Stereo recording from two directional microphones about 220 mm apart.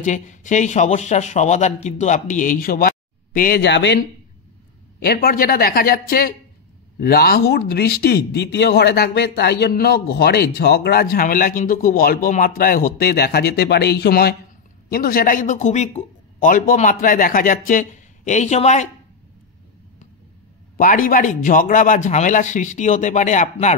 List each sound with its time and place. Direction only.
0.0 s a man's voice: 35° left (ahead or behind)
20.7 s a man's voice: 40° left (ahead or behind)